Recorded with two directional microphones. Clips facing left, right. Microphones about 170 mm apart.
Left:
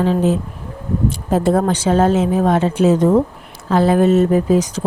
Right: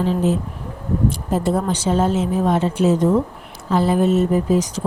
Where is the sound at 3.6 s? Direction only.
75° left (ahead or behind); by 4.8 s 90° left.